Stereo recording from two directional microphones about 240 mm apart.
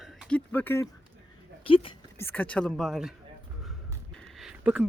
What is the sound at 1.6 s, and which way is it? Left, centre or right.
Speech, left.